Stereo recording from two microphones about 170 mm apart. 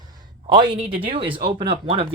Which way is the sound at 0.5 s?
30° right (ahead or behind).